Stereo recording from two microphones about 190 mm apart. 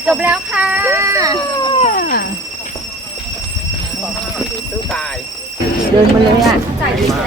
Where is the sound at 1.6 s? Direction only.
25° left (ahead or behind).